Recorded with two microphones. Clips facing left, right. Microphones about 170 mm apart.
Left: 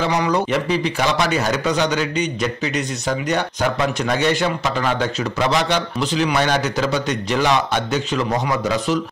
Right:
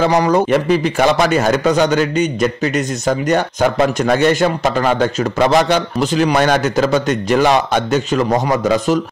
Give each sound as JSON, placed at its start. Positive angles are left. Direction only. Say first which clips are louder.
{"t": 0.0, "sound": "a man's voice", "louder": "right 6 dB", "side_deg": -45}